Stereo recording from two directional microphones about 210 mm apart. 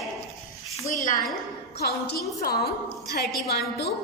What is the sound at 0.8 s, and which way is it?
Speech, 15° left (ahead or behind).